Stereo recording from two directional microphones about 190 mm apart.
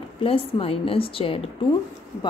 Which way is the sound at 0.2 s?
30° left (ahead or behind).